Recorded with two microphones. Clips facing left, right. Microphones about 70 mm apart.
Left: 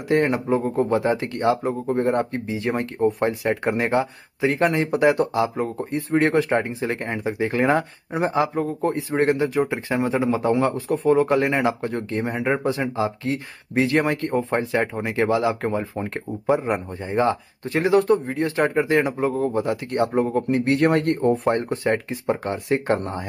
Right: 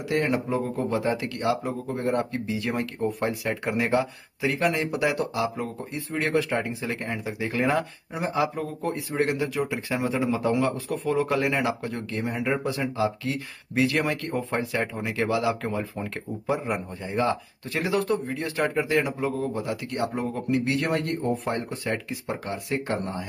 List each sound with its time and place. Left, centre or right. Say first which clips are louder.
0.1 s a man's voice: left 5 dB; left